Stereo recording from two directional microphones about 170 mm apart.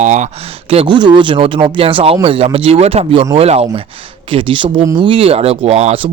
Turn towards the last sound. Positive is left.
turn(degrees=-35)  # may be behind; listen again after turning